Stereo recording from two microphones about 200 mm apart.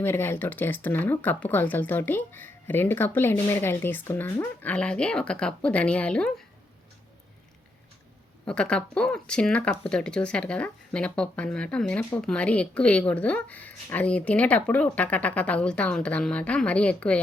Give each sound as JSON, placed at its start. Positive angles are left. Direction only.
{"t": 0.0, "sound": "speech", "side_deg": 10}
{"t": 8.4, "sound": "speech", "side_deg": 5}